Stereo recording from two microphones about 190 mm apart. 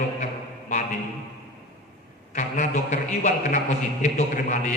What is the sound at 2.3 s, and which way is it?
A man's voice, 40° left (ahead or behind).